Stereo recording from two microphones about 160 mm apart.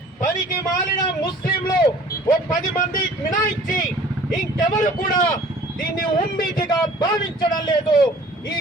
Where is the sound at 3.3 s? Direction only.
55° left (ahead or behind).